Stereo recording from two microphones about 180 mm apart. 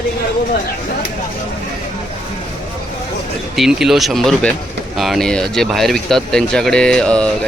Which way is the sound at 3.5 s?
Centre (ahead or behind).